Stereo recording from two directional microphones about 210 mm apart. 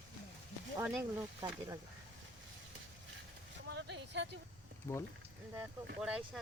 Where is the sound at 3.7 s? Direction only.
55° right (ahead or behind).